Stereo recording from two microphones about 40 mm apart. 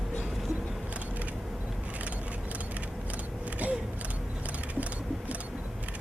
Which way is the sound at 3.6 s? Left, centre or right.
Right.